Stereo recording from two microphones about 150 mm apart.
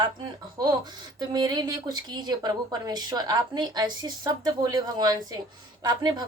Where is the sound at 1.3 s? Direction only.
25° right (ahead or behind).